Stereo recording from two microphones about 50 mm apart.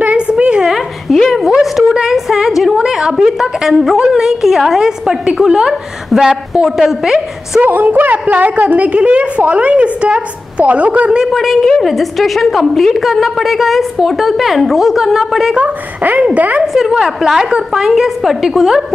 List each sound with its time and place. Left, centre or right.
0.3 s a sound: centre
0.7 s a sound: centre
2.8 s a woman's voice: centre
7.6 s a woman's voice: right
11.2 s a woman's voice: centre
15.5 s a woman's voice: right
16.6 s a woman's voice: centre